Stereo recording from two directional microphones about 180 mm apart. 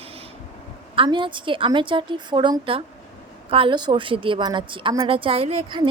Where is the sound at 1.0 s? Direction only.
25° right (ahead or behind).